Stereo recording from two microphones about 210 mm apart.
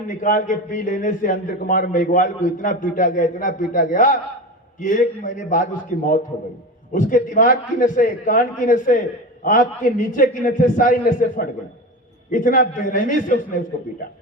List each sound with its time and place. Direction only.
0.1 s a man's voice: 40° left (ahead or behind)
6.9 s a man's voice: 40° left (ahead or behind)